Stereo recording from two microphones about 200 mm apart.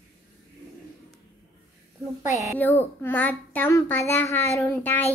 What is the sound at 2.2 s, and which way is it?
Speech, 35° left (ahead or behind).